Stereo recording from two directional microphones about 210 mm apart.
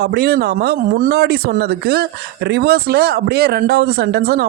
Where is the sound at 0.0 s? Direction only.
50° right (ahead or behind).